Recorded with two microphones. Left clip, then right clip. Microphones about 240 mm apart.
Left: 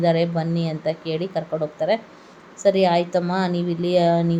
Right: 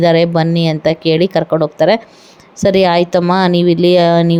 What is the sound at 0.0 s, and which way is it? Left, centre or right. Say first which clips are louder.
Speech: right 10 dB; right.